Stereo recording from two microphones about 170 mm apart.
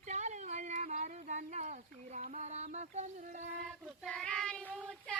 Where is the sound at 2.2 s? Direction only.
45° right (ahead or behind).